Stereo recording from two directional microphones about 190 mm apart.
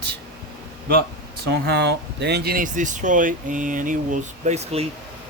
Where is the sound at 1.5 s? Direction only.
60° right (ahead or behind); by 4.8 s 35° right (ahead or behind).